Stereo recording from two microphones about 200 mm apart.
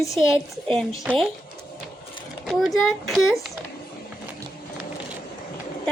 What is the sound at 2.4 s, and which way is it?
Speech, centre (ahead or behind).